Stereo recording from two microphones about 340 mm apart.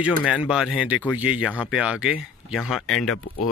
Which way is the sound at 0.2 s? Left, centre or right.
Centre.